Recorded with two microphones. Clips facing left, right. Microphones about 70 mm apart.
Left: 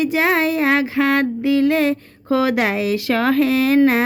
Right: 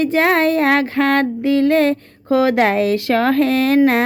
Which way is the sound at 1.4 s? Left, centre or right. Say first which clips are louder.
Right 2 dB; right.